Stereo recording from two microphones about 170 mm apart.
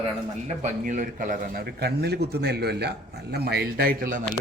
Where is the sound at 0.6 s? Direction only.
50° right (ahead or behind).